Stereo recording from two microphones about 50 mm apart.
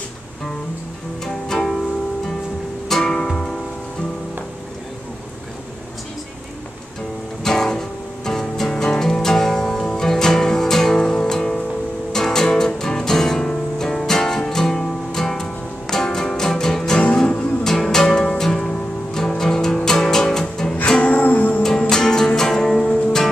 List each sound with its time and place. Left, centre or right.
1.2 s music: centre
2.9 s music: centre
7.4 s music: centre
21.1 s music: left
21.6 s music: centre